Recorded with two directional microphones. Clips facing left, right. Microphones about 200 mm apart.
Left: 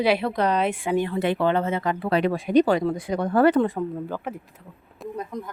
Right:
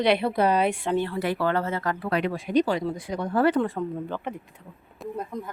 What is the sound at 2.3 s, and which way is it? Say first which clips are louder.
Speech: left 5 dB; 55° left (ahead or behind).